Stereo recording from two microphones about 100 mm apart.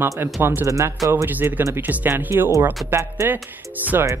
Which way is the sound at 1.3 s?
15° right (ahead or behind).